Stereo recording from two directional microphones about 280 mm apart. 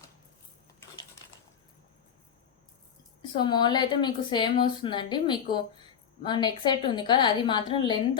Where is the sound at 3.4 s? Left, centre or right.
Centre.